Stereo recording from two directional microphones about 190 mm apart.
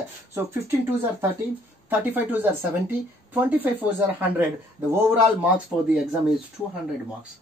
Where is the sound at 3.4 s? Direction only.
10° right (ahead or behind).